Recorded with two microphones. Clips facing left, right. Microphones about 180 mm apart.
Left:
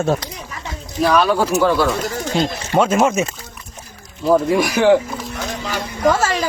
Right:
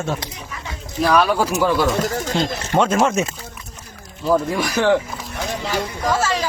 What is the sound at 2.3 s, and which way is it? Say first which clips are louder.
Speech: left 3 dB; 10° left (ahead or behind).